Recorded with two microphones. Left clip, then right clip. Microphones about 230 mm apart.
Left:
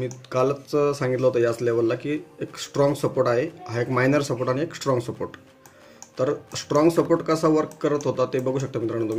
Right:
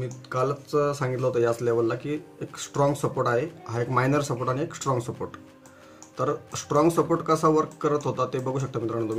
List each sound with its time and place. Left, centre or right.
0.0 s speech: centre